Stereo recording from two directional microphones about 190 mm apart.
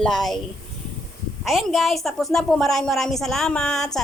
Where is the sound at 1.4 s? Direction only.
Centre (ahead or behind).